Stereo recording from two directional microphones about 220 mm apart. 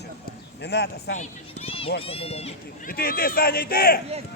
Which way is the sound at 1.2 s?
25° left (ahead or behind).